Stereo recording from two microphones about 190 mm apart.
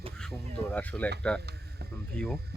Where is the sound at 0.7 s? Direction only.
10° left (ahead or behind).